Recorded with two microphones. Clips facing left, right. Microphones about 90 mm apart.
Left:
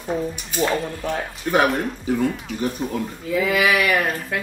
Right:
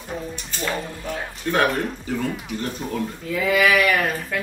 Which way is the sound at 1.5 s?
20° left (ahead or behind).